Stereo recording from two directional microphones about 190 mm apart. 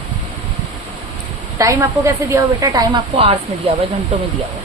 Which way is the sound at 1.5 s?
15° right (ahead or behind).